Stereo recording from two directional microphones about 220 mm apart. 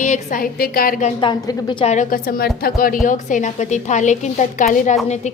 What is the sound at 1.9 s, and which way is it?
A woman's voice, 40° left (ahead or behind).